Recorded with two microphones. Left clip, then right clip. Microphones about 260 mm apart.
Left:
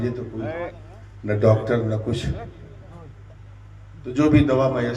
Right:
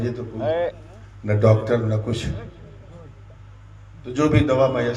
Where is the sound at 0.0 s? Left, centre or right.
Right.